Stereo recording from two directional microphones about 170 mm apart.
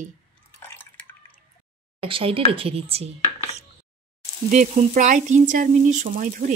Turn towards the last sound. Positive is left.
turn(degrees=-50)  # may be behind; listen again after turning